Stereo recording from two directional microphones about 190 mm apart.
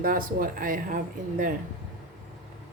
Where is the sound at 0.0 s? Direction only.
50° right (ahead or behind).